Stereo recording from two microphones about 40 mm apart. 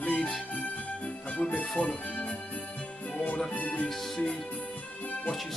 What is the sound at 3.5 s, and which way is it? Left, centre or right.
Music, left.